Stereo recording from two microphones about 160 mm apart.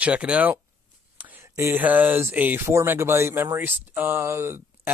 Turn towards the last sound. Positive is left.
turn(degrees=-15)  # may be behind; listen again after turning